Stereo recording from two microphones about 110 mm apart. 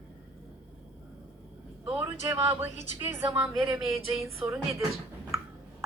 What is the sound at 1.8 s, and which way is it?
A woman's voice, 15° right (ahead or behind).